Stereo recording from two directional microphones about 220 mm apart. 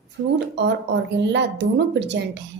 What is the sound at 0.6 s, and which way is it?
A woman's voice, 50° right (ahead or behind).